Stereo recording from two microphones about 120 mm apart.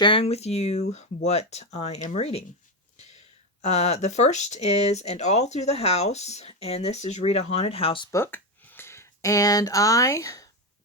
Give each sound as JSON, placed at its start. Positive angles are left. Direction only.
{"t": 0.0, "sound": "speech", "side_deg": 50}
{"t": 3.6, "sound": "speech", "side_deg": 65}
{"t": 8.1, "sound": "speech", "side_deg": 20}